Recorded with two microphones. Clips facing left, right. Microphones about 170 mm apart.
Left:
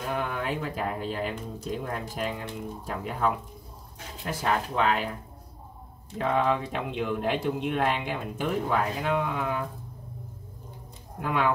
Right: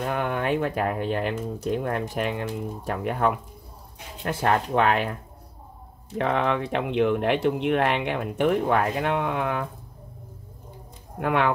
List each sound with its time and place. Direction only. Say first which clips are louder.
0.1 s speech: right 4 dB; 60° right (ahead or behind)
6.1 s speech: right 2 dB; 70° right (ahead or behind)
11.1 s speech: right 3 dB; 65° right (ahead or behind)